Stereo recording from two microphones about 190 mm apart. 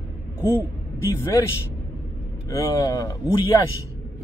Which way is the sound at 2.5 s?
20° left (ahead or behind).